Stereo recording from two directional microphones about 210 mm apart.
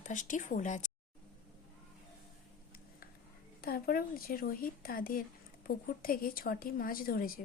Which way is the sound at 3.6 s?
45° left (ahead or behind).